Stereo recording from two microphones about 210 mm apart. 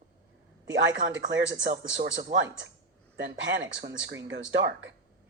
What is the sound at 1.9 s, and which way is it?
Speech, 60° right (ahead or behind).